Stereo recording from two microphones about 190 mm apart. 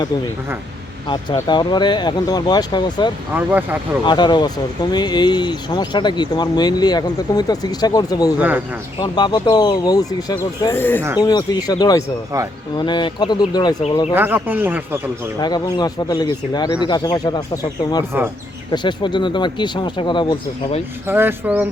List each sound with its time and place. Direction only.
1.0 s speech: 25° left (ahead or behind)
3.3 s speech: 10° right (ahead or behind)
4.0 s speech: 25° left (ahead or behind)
8.4 s speech: 10° right (ahead or behind)
9.0 s speech: 20° left (ahead or behind)
14.1 s speech: 10° right (ahead or behind)
15.4 s speech: 20° left (ahead or behind)
21.1 s speech: 10° right (ahead or behind)